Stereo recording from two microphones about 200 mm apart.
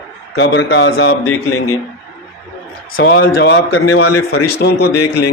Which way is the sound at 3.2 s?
55° left (ahead or behind).